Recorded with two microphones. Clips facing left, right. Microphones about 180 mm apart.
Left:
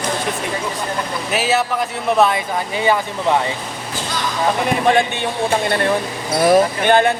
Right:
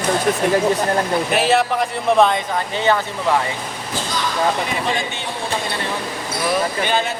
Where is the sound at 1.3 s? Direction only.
Centre (ahead or behind).